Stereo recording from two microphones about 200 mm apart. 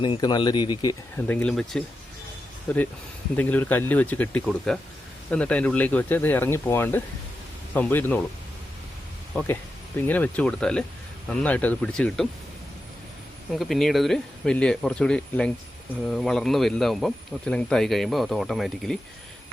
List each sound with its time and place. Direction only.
0.0 s speech: 20° left (ahead or behind)
1.3 s speech: 5° left (ahead or behind)
9.3 s speech: 5° left (ahead or behind)
13.5 s speech: centre (ahead or behind)